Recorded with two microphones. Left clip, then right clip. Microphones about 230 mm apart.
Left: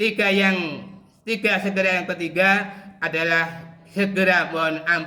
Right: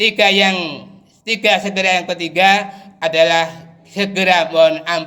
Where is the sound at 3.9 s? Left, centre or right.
Centre.